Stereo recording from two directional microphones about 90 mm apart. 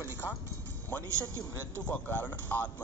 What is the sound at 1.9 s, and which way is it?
Speech, 20° left (ahead or behind).